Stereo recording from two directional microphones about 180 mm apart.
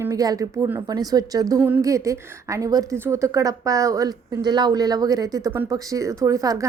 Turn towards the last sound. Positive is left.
turn(degrees=-20)  # may be behind; listen again after turning